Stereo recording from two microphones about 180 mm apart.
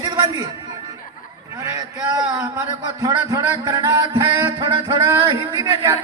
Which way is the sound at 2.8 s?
20° right (ahead or behind).